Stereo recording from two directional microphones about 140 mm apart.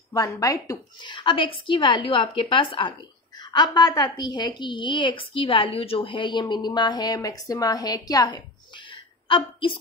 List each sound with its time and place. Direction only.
0.1 s speech: 25° left (ahead or behind)
1.0 s a woman's voice: 35° left (ahead or behind)